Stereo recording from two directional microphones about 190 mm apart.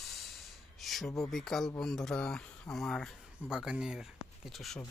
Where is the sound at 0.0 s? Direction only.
Centre (ahead or behind).